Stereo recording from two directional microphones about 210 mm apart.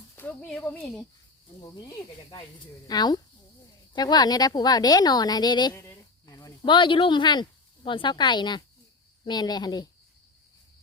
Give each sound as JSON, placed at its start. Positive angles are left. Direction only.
{"t": 0.2, "sound": "a sound", "side_deg": 5}
{"t": 0.6, "sound": "speech", "side_deg": 5}
{"t": 2.8, "sound": "a woman's voice", "side_deg": 20}